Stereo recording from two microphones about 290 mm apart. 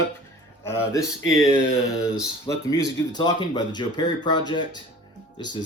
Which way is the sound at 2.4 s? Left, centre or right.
Centre.